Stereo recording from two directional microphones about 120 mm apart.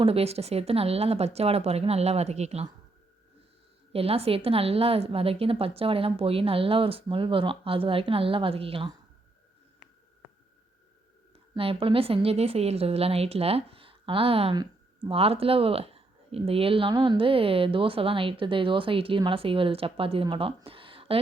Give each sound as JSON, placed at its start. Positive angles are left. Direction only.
{"t": 0.0, "sound": "speech", "side_deg": -55}
{"t": 3.9, "sound": "a woman's voice", "side_deg": -55}
{"t": 11.5, "sound": "a woman's voice", "side_deg": -50}
{"t": 14.5, "sound": "a sound", "side_deg": -35}
{"t": 15.1, "sound": "a woman's voice", "side_deg": -55}
{"t": 20.7, "sound": "a sound", "side_deg": -50}